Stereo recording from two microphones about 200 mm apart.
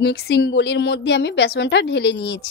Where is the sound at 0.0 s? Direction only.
55° left (ahead or behind).